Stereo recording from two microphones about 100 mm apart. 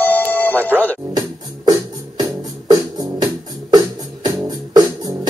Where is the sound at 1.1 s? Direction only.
40° right (ahead or behind).